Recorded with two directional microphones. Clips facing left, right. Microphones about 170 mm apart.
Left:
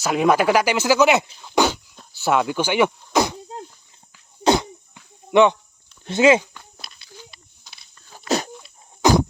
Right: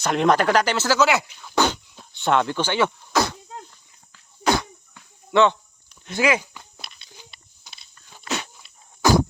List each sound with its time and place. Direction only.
0.0 s speech: 5° left (ahead or behind); by 1.6 s 20° left (ahead or behind)
2.0 s speech: 5° left (ahead or behind)
4.4 s wheeze: 20° left (ahead or behind)
5.3 s speech: 15° left (ahead or behind)
6.5 s walk: 10° right (ahead or behind)
7.0 s a sound: 20° right (ahead or behind)
8.3 s dog: 35° left (ahead or behind)
9.0 s a sound: 20° left (ahead or behind)